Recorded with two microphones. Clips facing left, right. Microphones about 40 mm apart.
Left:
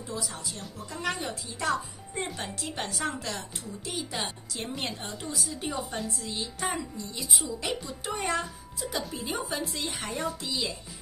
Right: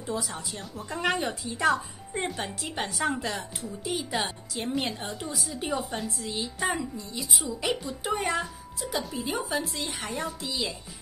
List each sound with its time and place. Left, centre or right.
0.0 s speech: right
1.7 s speech: centre